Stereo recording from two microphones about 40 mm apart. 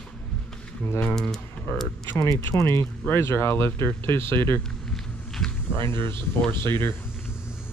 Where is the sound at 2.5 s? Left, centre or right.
Left.